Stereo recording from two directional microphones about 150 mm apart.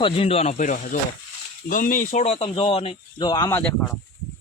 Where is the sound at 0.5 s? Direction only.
55° left (ahead or behind).